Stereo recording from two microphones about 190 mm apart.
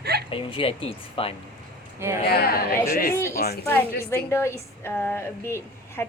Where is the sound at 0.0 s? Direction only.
60° right (ahead or behind).